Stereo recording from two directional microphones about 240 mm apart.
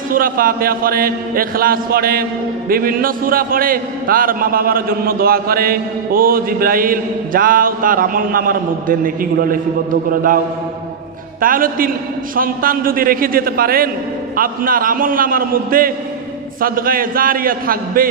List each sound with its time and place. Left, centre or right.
0.1 s a man's voice: right
11.4 s a man's voice: right